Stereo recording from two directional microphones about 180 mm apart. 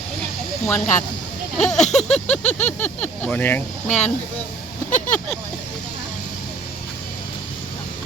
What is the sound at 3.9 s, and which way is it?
Speech, 40° left (ahead or behind).